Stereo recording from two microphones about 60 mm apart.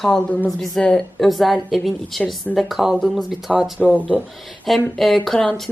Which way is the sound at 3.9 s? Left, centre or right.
Left.